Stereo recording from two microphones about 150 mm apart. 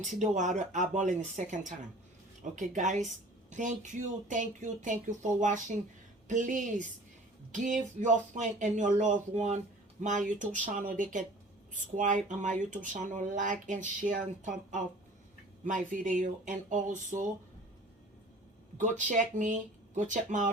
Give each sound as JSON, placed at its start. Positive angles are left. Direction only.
{"t": 0.0, "sound": "speech", "side_deg": -55}
{"t": 18.8, "sound": "speech", "side_deg": -55}